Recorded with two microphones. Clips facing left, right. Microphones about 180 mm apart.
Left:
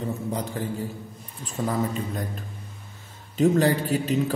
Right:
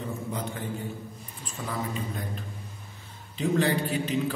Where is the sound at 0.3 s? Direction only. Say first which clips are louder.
Left 4 dB; 35° left (ahead or behind).